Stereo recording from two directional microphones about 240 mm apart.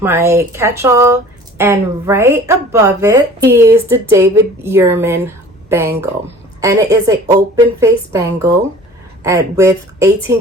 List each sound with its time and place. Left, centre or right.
0.0 s a woman's voice: centre